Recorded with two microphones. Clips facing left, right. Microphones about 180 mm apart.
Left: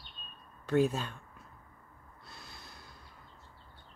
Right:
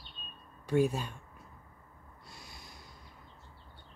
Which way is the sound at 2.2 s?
15° right (ahead or behind).